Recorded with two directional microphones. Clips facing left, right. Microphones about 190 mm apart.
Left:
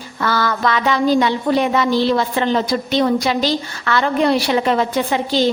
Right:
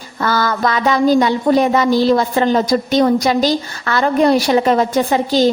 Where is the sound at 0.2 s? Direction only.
40° right (ahead or behind).